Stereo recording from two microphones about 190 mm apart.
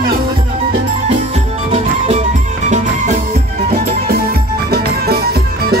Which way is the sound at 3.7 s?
55° right (ahead or behind).